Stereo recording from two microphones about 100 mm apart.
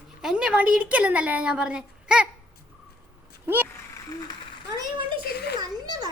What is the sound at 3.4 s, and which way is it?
Speech, 20° right (ahead or behind).